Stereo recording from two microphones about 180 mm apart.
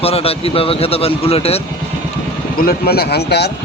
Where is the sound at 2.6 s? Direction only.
55° left (ahead or behind).